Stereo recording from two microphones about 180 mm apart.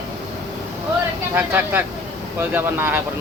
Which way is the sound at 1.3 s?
10° right (ahead or behind).